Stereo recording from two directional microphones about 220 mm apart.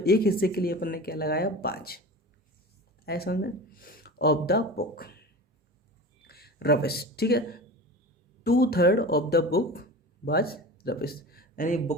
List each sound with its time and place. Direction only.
0.0 s speech: 45° left (ahead or behind)
3.1 s speech: 45° left (ahead or behind)